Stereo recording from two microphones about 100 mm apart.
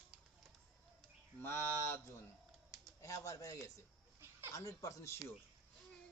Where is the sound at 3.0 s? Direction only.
35° left (ahead or behind).